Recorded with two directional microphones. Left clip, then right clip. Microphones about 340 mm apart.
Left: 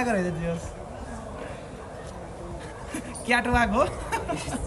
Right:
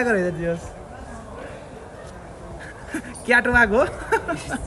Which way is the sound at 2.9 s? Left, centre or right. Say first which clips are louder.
Right 6 dB; centre.